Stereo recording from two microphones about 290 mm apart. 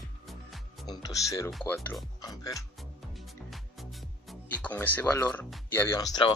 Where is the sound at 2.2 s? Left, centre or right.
Centre.